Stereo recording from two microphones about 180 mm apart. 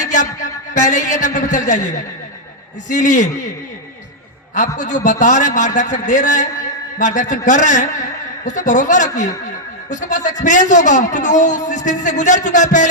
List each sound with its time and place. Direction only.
0.1 s a man's voice: 45° left (ahead or behind)
4.5 s a man's voice: 45° left (ahead or behind)